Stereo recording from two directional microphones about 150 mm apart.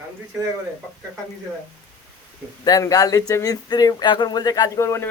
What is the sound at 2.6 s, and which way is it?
Speech, 25° left (ahead or behind).